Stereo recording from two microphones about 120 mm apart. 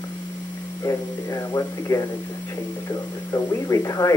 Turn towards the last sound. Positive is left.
turn(degrees=30)  # may be behind; listen again after turning